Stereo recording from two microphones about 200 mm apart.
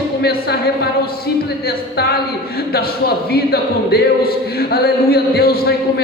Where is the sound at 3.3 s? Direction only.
50° left (ahead or behind).